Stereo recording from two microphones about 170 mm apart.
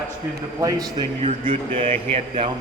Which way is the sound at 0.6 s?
20° right (ahead or behind).